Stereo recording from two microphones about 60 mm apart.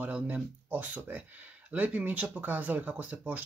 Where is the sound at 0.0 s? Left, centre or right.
Right.